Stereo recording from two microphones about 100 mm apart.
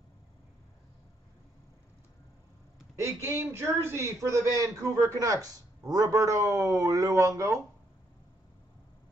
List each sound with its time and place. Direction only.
3.0 s a man's voice: 25° right (ahead or behind)